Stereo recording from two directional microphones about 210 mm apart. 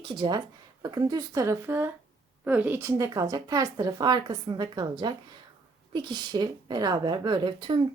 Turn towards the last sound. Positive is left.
turn(degrees=-20)  # may be behind; listen again after turning